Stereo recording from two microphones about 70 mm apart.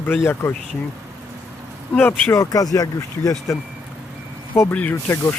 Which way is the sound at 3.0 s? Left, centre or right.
Left.